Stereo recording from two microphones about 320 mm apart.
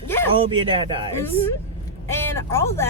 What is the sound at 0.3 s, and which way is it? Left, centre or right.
Speech, centre.